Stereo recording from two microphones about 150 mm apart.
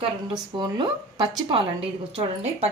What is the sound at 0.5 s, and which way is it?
Speech, 30° right (ahead or behind).